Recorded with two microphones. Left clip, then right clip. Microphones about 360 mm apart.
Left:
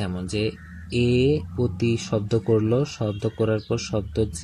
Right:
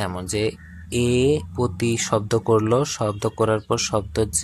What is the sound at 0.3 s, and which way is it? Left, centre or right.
Speech, right.